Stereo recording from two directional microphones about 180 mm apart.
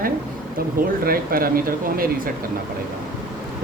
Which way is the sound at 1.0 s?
55° right (ahead or behind).